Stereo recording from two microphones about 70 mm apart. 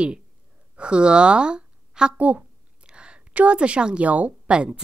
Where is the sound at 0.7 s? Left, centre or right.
Centre.